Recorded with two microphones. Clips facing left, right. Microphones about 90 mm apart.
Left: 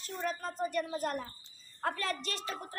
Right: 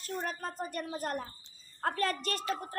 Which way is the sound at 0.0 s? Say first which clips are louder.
Even; 45° right (ahead or behind).